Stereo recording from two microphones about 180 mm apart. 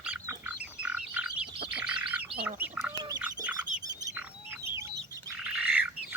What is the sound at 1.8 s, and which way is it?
Bird, 5° right (ahead or behind).